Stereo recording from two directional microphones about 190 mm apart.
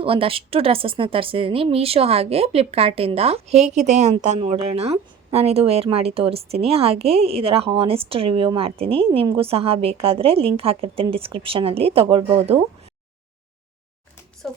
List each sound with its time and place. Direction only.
0.0 s a woman's voice: 30° right (ahead or behind)
14.4 s speech: centre (ahead or behind)